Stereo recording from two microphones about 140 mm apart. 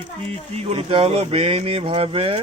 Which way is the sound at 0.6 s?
45° right (ahead or behind).